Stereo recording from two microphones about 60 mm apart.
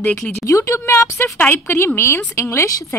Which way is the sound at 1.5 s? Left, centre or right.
Left.